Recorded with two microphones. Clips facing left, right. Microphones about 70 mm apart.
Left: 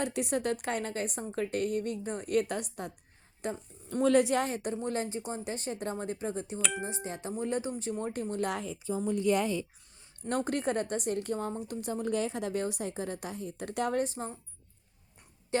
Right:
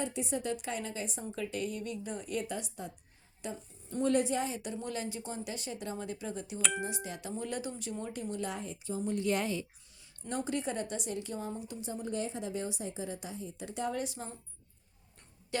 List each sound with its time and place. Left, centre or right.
0.0 s a woman's voice: left
1.2 s a woman's voice: left
4.0 s a woman's voice: left
4.8 s tuning fork: left
7.3 s speech: left
8.1 s a woman's voice: left
10.2 s a woman's voice: left
14.0 s tuning fork: left